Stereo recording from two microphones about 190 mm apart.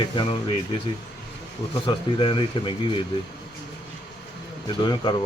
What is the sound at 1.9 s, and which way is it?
A man's voice, 25° left (ahead or behind).